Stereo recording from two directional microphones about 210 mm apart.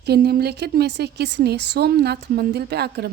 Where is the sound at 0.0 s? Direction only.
50° right (ahead or behind).